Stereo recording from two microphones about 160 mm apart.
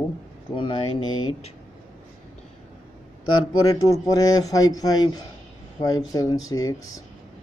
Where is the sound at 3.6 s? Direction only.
20° left (ahead or behind).